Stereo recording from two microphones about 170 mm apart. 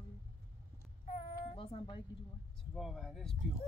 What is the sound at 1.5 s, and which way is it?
Speech, 35° left (ahead or behind).